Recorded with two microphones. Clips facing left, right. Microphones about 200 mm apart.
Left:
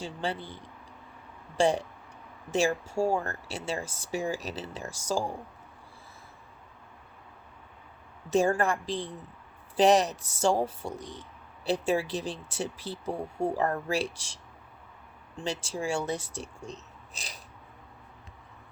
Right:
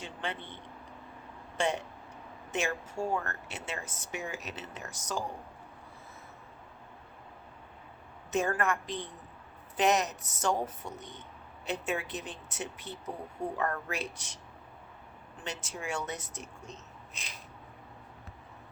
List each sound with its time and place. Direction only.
0.0 s speech: 35° left (ahead or behind)
8.3 s speech: 30° left (ahead or behind)
15.4 s speech: 30° left (ahead or behind)